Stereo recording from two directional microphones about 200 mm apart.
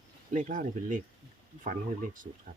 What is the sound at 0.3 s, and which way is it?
Speech, 40° right (ahead or behind).